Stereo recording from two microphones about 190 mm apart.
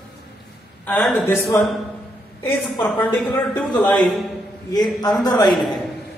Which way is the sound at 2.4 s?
10° left (ahead or behind).